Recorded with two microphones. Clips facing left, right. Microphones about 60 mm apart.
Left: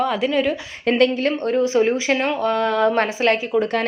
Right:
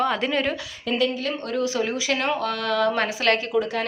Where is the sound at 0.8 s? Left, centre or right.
Left.